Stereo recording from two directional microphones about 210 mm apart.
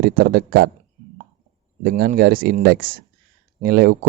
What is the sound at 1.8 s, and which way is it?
Speech, 45° right (ahead or behind).